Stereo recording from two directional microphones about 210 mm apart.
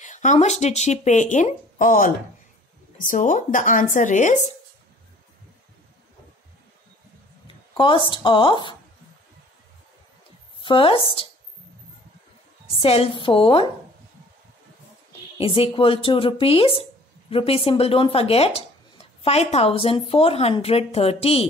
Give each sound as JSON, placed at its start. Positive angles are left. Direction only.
{"t": 0.0, "sound": "speech", "side_deg": 35}
{"t": 7.4, "sound": "speech", "side_deg": 25}
{"t": 10.6, "sound": "speech", "side_deg": 25}
{"t": 12.8, "sound": "speech", "side_deg": 25}
{"t": 15.3, "sound": "speech", "side_deg": 25}